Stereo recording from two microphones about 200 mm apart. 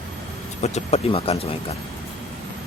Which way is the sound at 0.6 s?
30° left (ahead or behind).